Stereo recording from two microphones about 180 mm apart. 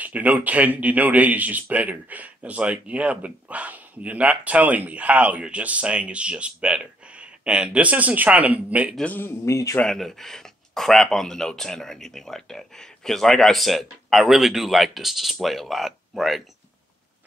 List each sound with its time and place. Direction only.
0.0 s a man's voice: 10° right (ahead or behind)
9.0 s a man's voice: 10° left (ahead or behind)
9.8 s speech: centre (ahead or behind)